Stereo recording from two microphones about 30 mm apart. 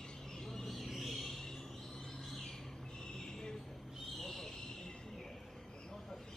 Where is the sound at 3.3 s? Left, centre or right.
Left.